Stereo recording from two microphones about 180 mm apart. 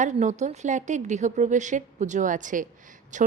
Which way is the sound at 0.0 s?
40° right (ahead or behind).